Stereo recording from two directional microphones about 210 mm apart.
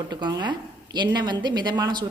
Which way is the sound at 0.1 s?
20° right (ahead or behind).